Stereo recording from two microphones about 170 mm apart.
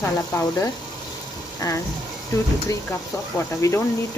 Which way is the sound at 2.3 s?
15° left (ahead or behind).